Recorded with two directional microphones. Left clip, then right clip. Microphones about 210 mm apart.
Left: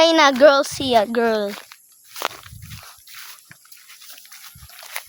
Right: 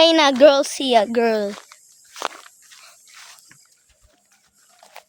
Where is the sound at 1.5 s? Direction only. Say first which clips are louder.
Left 2 dB; 50° left (ahead or behind).